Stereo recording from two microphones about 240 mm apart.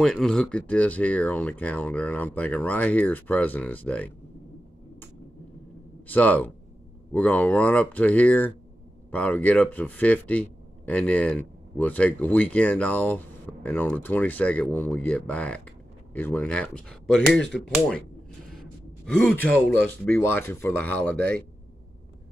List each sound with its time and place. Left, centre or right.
0.0 s speech: centre
6.0 s speech: centre